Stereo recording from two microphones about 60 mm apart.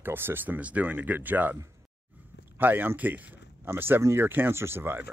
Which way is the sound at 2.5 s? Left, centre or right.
Right.